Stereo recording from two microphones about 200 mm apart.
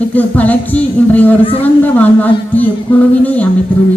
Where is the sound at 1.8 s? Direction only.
10° left (ahead or behind).